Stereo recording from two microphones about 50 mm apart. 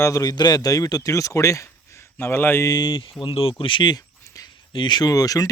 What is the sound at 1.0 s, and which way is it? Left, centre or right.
Speech, left.